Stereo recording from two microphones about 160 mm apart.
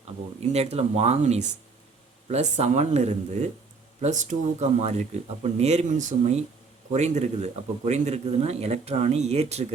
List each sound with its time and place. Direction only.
0.3 s speech: 40° right (ahead or behind)